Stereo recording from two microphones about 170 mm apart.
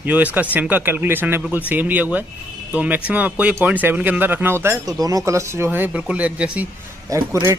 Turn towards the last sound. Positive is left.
turn(degrees=-20)  # may be behind; listen again after turning